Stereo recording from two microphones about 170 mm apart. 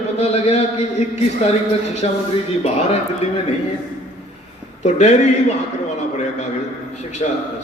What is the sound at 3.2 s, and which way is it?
Speech, 40° left (ahead or behind).